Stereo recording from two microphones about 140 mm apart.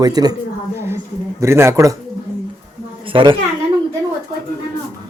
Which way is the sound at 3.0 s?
35° right (ahead or behind).